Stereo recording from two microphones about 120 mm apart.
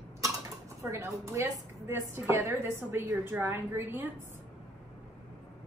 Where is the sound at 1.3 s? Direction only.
25° right (ahead or behind).